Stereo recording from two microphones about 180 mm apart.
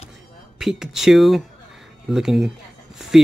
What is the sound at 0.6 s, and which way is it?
Speech, centre (ahead or behind).